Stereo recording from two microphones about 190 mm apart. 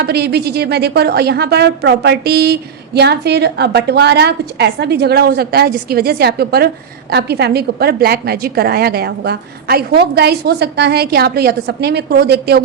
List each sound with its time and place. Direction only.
0.0 s a woman's voice: 60° right (ahead or behind)